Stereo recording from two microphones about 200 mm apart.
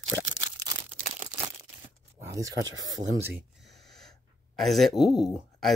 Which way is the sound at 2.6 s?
70° right (ahead or behind).